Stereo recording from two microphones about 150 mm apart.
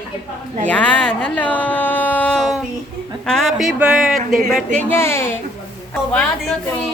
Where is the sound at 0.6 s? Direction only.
10° left (ahead or behind).